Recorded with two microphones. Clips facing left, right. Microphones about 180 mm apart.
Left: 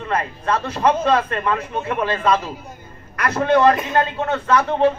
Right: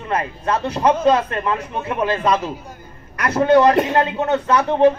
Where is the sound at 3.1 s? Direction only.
20° right (ahead or behind).